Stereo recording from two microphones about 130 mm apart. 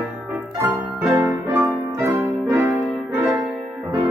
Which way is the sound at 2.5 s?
25° right (ahead or behind).